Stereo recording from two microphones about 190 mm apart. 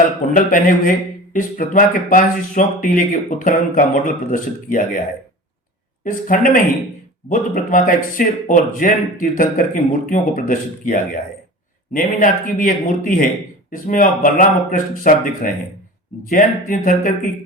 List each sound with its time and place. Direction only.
0.3 s a man's voice: 45° left (ahead or behind)
6.1 s a man's voice: 45° left (ahead or behind)